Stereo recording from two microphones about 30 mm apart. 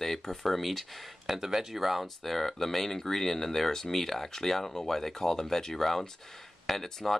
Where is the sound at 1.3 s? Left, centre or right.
Centre.